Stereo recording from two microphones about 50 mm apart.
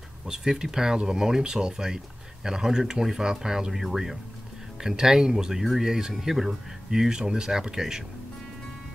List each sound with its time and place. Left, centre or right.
0.3 s speech: centre